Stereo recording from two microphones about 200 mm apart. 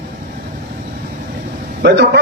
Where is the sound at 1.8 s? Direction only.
60° right (ahead or behind).